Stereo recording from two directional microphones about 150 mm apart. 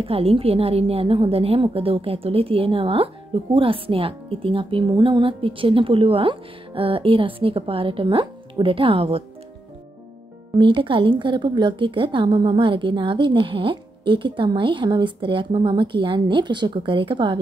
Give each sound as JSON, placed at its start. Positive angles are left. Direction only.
{"t": 0.0, "sound": "a woman's voice", "side_deg": -40}
{"t": 10.6, "sound": "a woman's voice", "side_deg": -35}